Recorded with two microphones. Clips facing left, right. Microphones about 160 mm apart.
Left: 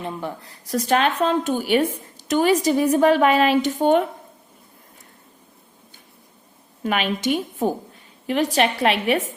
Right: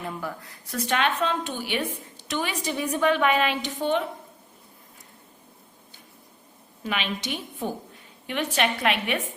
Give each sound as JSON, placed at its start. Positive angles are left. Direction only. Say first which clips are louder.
{"t": 0.0, "sound": "speech", "louder": "left 4 dB", "side_deg": 25}
{"t": 0.6, "sound": "a woman's voice", "louder": "left 6 dB", "side_deg": 40}
{"t": 6.8, "sound": "a woman's voice", "louder": "left 8 dB", "side_deg": 45}